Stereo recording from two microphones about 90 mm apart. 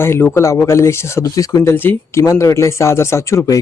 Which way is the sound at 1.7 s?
25° left (ahead or behind).